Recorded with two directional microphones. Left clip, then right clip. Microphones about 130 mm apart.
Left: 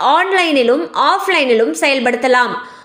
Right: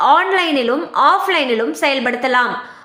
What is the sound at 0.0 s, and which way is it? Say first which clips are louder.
A woman's voice: even; 20° left (ahead or behind).